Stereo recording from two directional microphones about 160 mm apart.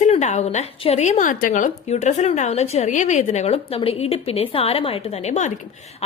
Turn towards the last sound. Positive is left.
turn(degrees=45)  # may be behind; listen again after turning